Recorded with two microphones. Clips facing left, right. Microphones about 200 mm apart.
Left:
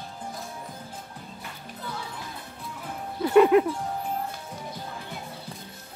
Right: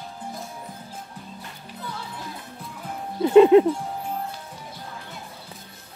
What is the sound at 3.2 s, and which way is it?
Speech, 25° right (ahead or behind).